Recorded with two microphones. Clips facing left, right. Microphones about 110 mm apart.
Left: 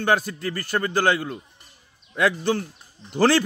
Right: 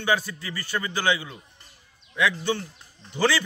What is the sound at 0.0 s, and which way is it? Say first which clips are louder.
A man's voice: left 4 dB; 50° left (ahead or behind).